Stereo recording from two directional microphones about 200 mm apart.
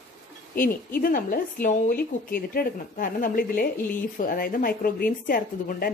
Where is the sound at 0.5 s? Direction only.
45° left (ahead or behind).